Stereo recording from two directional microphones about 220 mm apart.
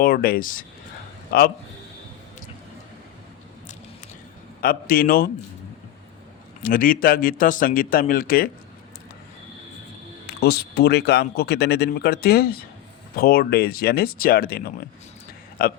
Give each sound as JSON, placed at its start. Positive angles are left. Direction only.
{"t": 0.0, "sound": "a man's voice", "side_deg": 40}
{"t": 4.6, "sound": "a man's voice", "side_deg": 40}
{"t": 6.6, "sound": "a man's voice", "side_deg": 40}
{"t": 10.2, "sound": "speech", "side_deg": 45}